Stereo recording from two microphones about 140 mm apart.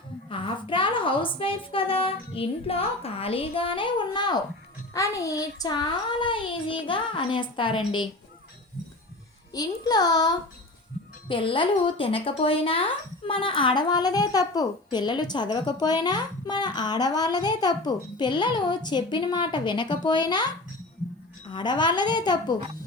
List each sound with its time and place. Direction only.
0.3 s a woman's voice: 40° left (ahead or behind)
9.5 s a child's voice: 30° left (ahead or behind)
11.3 s a woman's voice: 40° left (ahead or behind)
21.5 s a woman's voice: 30° left (ahead or behind)